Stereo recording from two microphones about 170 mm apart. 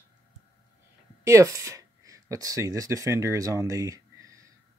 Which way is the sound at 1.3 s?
20° right (ahead or behind).